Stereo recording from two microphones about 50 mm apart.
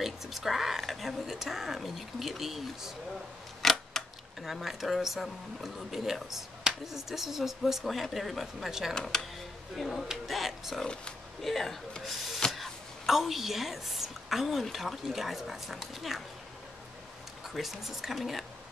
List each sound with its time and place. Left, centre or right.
0.0 s speech: centre
3.6 s scissors: centre
4.4 s speech: centre
9.1 s speech: centre
10.8 s speech: centre
11.4 s speech: centre
12.4 s a sound: centre
13.0 s speech: centre
17.6 s speech: centre